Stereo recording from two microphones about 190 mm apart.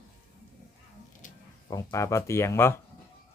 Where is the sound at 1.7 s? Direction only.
15° left (ahead or behind).